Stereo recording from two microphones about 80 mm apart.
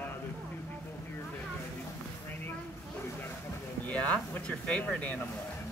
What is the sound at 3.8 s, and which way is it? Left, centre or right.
Speech, centre.